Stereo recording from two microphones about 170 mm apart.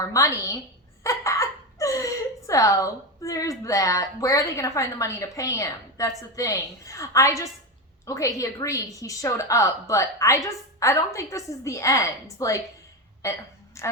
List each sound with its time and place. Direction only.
0.0 s a woman's voice: 20° left (ahead or behind)
1.0 s a sound: 15° left (ahead or behind)
3.6 s a woman's voice: 20° left (ahead or behind)